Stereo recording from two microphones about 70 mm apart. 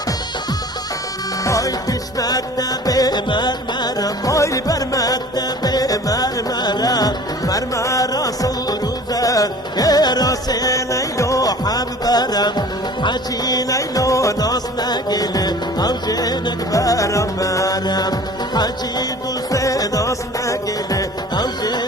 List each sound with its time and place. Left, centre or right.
1.5 s music: left
4.3 s music: left
17.8 s music: left
19.5 s music: left
21.3 s music: left